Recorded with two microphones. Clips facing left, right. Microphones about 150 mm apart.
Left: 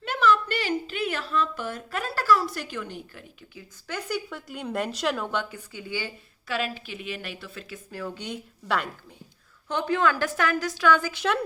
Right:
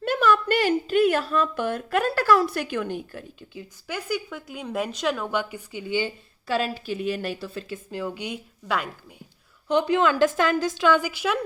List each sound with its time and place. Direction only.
0.0 s a woman's voice: 45° right (ahead or behind)
3.8 s a woman's voice: 5° right (ahead or behind)
6.5 s a woman's voice: 35° right (ahead or behind); by 8.9 s 5° right (ahead or behind)
9.6 s a woman's voice: 15° right (ahead or behind)
11.1 s a woman's voice: 5° right (ahead or behind)